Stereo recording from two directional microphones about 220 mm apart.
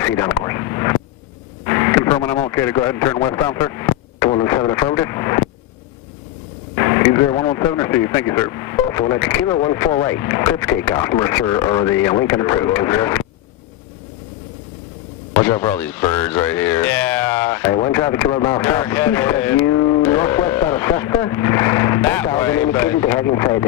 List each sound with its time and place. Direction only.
0.0 s radio: 10° left (ahead or behind)
1.6 s speech: 15° left (ahead or behind)
6.7 s speech: 15° left (ahead or behind)
15.4 s a sound: 10° left (ahead or behind)